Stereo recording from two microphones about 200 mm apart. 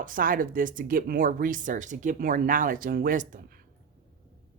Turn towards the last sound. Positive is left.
turn(degrees=-40)  # may be behind; listen again after turning